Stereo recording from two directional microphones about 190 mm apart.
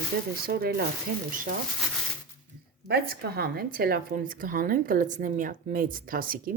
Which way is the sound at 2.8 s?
55° right (ahead or behind).